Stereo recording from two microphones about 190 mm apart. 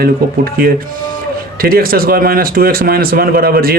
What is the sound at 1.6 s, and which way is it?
Speech, 50° right (ahead or behind).